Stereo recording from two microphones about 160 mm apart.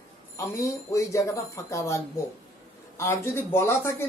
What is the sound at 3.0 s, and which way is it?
Speech, 15° left (ahead or behind).